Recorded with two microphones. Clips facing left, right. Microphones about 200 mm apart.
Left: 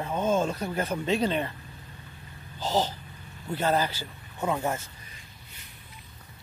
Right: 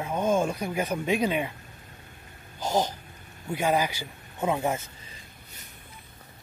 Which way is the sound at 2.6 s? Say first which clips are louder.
Right 1 dB; 15° right (ahead or behind).